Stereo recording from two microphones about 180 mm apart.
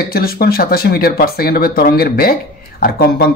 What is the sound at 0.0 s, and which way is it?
Speech, 55° left (ahead or behind).